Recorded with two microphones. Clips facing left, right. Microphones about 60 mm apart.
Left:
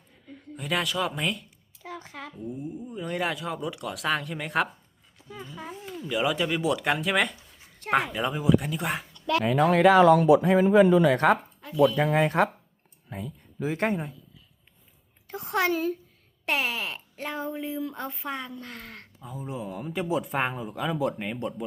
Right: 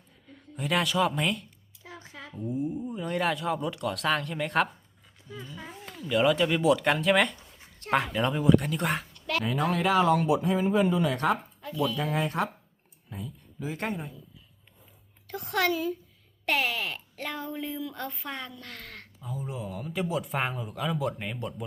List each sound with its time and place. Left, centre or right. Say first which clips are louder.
0.3 s speech: right 1 dB; centre
1.8 s a sound: left 5 dB; left
2.3 s speech: right 6 dB; centre
6.1 s speech: right 3 dB; centre
9.4 s speech: left 6 dB; left
9.8 s speech: left 7 dB; left
11.1 s speech: left 5 dB; left
15.3 s speech: left 1 dB; left
15.7 s a woman's voice: left 2 dB; left
16.5 s speech: even; centre